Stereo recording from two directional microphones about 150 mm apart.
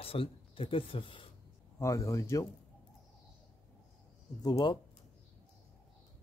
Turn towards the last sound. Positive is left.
turn(degrees=30)  # may be behind; listen again after turning